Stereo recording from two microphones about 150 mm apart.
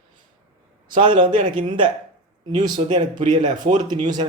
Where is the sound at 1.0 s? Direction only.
30° right (ahead or behind).